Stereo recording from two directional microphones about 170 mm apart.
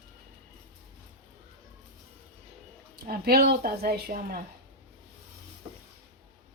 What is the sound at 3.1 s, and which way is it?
Speech, 65° right (ahead or behind).